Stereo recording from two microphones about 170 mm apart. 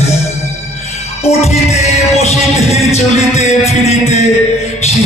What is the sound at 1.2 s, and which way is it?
Music, 40° left (ahead or behind).